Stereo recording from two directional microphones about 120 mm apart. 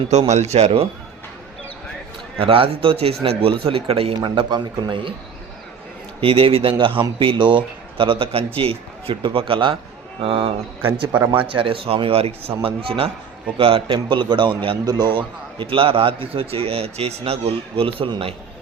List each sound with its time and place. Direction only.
0.1 s a man's voice: 70° right (ahead or behind)
2.4 s a man's voice: 50° right (ahead or behind)
6.1 s a man's voice: 50° right (ahead or behind)
10.8 s a man's voice: 15° right (ahead or behind)
11.3 s a man's voice: 45° right (ahead or behind)